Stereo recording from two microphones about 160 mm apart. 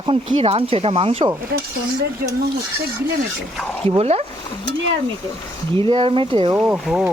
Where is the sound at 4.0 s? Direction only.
40° right (ahead or behind).